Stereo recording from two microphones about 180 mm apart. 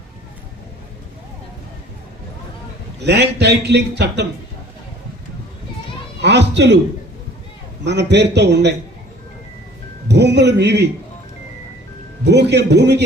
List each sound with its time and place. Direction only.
3.0 s a man's voice: 65° right (ahead or behind)
6.2 s a man's voice: 70° right (ahead or behind)
7.9 s a man's voice: 70° right (ahead or behind)
10.1 s a man's voice: 70° right (ahead or behind)
12.2 s a man's voice: 70° right (ahead or behind)